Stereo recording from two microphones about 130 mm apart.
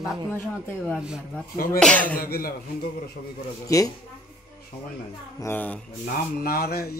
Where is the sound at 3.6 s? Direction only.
25° left (ahead or behind).